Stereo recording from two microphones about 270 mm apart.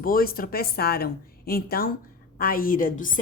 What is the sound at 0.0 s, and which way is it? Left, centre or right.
Speech, left.